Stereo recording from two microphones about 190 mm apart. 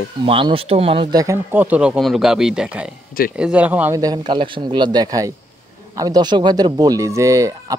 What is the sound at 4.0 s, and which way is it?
Speech, 20° right (ahead or behind).